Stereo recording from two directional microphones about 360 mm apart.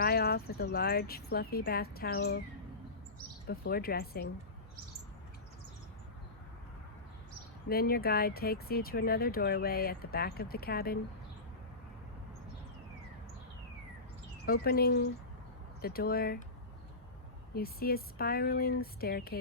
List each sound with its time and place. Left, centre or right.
0.0 s speech: left
3.4 s speech: left
7.7 s speech: left
14.4 s speech: left
17.5 s speech: left